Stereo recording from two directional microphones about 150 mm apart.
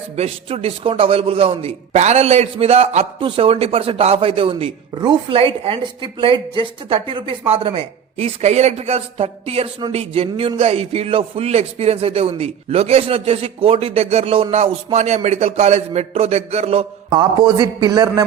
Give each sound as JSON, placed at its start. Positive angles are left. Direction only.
{"t": 0.2, "sound": "a man's voice", "side_deg": -40}
{"t": 17.2, "sound": "a man's voice", "side_deg": -30}